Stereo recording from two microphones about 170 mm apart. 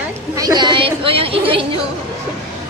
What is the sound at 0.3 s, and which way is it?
A woman's voice, 25° right (ahead or behind).